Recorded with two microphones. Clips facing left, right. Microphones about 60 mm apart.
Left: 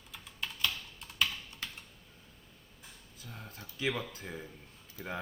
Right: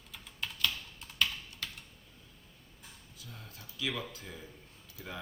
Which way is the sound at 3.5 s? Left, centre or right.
Left.